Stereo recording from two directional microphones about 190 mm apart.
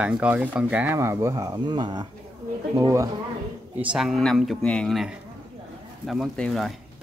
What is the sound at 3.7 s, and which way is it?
Speech, 5° right (ahead or behind).